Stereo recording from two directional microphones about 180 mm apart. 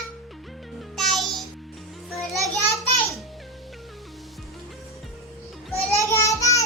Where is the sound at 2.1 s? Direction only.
Centre (ahead or behind).